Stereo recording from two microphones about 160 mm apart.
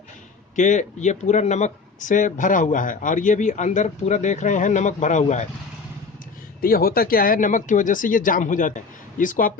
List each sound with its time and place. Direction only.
0.5 s speech: 50° left (ahead or behind)
6.6 s speech: 65° left (ahead or behind)